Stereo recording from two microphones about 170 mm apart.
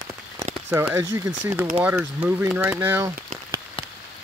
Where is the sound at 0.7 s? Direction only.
15° right (ahead or behind).